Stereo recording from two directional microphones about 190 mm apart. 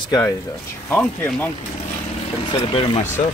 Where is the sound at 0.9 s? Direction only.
10° left (ahead or behind).